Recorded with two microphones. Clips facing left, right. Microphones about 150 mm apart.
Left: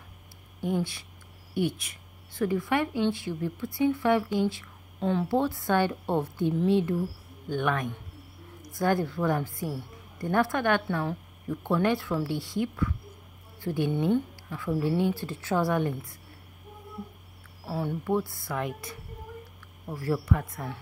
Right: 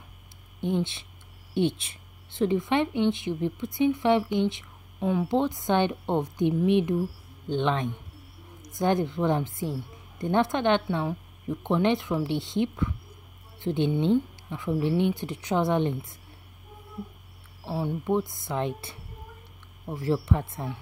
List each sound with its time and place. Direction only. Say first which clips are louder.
0.6 s speech: right 2 dB; 25° right (ahead or behind)
17.6 s speech: right 1 dB; 20° right (ahead or behind)